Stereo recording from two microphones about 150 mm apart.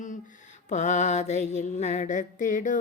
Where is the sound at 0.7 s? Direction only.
50° left (ahead or behind).